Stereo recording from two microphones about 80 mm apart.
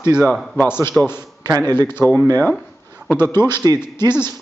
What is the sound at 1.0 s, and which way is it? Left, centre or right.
Speech, left.